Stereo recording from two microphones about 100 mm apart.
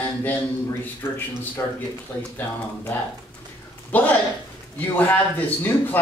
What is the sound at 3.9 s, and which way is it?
Speech, 15° left (ahead or behind).